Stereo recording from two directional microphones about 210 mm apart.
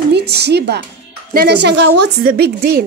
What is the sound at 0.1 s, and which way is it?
A woman's voice, 50° right (ahead or behind).